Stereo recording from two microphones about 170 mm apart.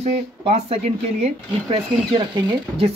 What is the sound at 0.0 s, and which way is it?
Speech, 35° right (ahead or behind).